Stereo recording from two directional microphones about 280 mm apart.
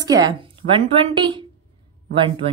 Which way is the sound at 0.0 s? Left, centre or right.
Centre.